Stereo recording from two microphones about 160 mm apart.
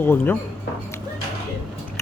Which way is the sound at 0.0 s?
15° left (ahead or behind).